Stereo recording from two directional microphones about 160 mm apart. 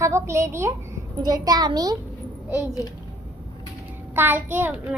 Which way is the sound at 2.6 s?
20° left (ahead or behind).